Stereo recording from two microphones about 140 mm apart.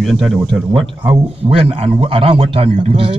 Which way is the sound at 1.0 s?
40° right (ahead or behind).